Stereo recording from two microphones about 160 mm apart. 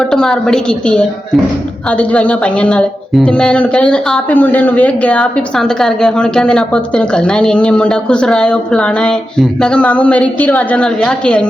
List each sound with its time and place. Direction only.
0.1 s a woman's voice: 5° left (ahead or behind)